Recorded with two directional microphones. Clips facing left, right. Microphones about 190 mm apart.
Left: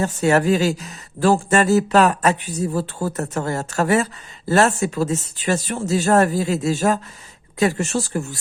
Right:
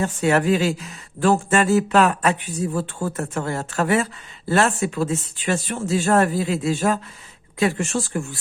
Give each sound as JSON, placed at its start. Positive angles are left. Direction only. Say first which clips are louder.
{"t": 0.0, "sound": "speech", "louder": "left 2 dB", "side_deg": 40}